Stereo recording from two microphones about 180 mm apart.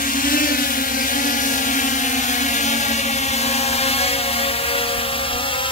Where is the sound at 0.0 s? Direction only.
50° left (ahead or behind).